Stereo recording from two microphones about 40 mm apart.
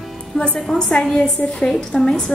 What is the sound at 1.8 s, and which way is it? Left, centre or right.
Speech, centre.